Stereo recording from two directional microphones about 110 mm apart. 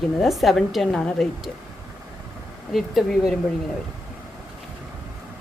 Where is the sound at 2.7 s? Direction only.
Centre (ahead or behind).